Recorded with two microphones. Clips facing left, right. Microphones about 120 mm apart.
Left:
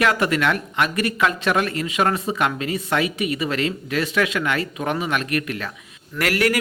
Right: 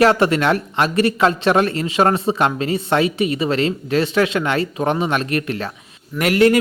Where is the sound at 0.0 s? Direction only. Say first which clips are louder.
Right 5 dB; 30° right (ahead or behind).